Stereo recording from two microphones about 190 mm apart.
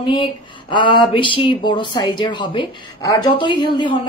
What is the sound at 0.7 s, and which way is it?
Speech, 25° left (ahead or behind).